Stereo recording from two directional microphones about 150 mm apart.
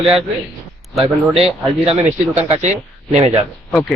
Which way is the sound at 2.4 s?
50° right (ahead or behind).